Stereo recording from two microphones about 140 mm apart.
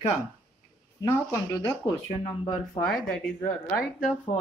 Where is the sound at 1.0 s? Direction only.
20° left (ahead or behind).